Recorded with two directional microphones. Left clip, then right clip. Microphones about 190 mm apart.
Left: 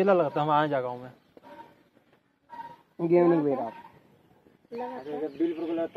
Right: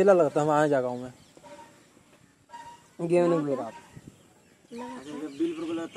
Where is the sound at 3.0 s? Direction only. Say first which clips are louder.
Left 2 dB; 75° right (ahead or behind).